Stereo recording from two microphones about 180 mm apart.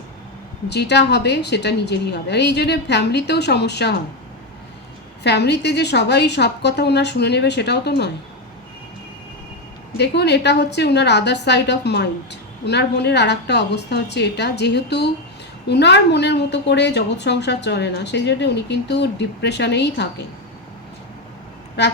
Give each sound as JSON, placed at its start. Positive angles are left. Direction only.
{"t": 0.7, "sound": "a woman's voice", "side_deg": 70}
{"t": 5.2, "sound": "a woman's voice", "side_deg": 70}
{"t": 10.0, "sound": "a woman's voice", "side_deg": 70}